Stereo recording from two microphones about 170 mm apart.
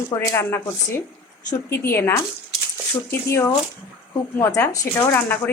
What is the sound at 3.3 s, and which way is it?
Speech, 15° left (ahead or behind).